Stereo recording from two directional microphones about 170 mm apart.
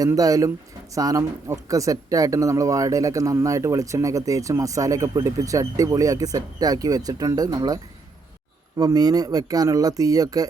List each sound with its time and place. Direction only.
0.0 s speech: 20° right (ahead or behind)
8.8 s speech: 20° right (ahead or behind)